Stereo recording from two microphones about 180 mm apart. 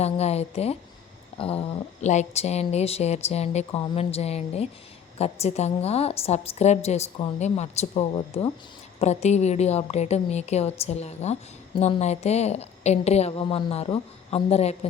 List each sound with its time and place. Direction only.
0.0 s speech: 35° left (ahead or behind)